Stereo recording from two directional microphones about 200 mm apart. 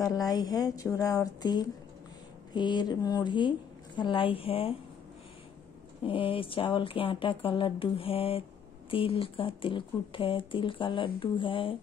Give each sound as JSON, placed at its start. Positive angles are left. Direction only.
{"t": 0.0, "sound": "speech", "side_deg": 20}
{"t": 6.0, "sound": "speech", "side_deg": 25}